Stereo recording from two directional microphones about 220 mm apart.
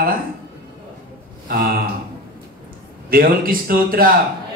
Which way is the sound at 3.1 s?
40° right (ahead or behind).